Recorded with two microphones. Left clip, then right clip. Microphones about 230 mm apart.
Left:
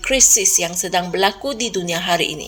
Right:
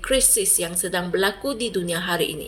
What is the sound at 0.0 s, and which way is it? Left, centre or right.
Speech, left.